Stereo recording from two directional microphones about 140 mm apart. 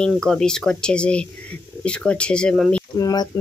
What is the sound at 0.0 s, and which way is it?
Speech, 5° left (ahead or behind).